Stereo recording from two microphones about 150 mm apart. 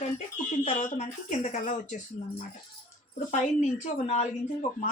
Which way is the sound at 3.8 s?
50° left (ahead or behind).